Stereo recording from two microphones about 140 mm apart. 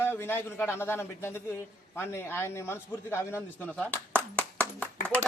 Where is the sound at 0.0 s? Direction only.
15° left (ahead or behind).